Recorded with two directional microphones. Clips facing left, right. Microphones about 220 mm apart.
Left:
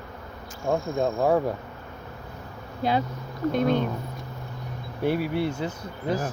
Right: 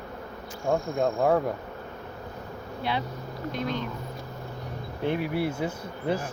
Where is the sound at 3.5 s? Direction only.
50° left (ahead or behind).